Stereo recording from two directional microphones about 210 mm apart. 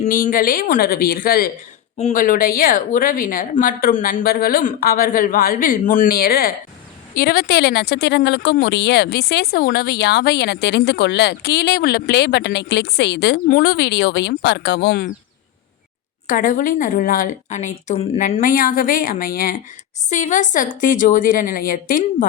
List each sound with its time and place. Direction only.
0.0 s a woman's voice: 40° left (ahead or behind)
16.2 s a woman's voice: 40° left (ahead or behind)